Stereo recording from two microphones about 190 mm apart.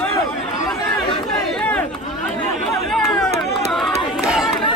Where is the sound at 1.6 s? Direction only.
5° left (ahead or behind).